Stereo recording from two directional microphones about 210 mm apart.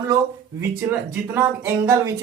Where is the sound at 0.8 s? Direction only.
10° right (ahead or behind).